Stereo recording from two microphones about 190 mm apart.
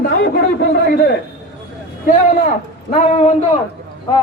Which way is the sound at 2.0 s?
40° left (ahead or behind).